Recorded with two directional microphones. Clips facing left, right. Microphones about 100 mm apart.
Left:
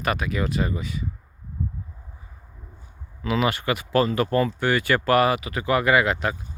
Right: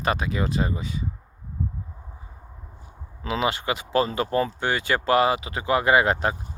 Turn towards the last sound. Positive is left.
turn(degrees=-35)  # may be behind; listen again after turning